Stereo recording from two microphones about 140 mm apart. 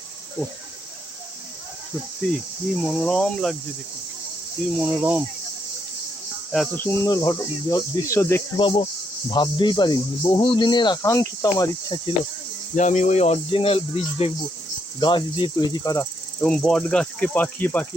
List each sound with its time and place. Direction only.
2.2 s insect: 10° left (ahead or behind)
2.9 s cricket: 5° left (ahead or behind)
4.8 s speech: 10° right (ahead or behind)
6.7 s speech: 20° left (ahead or behind)
8.5 s speech: 40° left (ahead or behind)
12.7 s speech: 60° left (ahead or behind)
15.0 s speech: 30° left (ahead or behind)
16.4 s insect: 5° left (ahead or behind)